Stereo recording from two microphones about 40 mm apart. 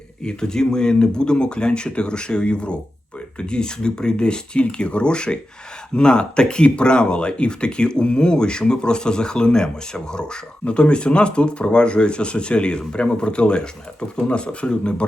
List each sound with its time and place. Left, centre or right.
0.3 s speech: centre